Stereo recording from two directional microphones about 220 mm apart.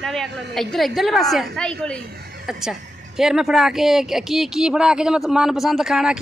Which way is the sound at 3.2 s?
Centre (ahead or behind).